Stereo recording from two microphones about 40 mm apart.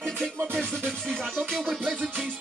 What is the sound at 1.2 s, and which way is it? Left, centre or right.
Music, centre.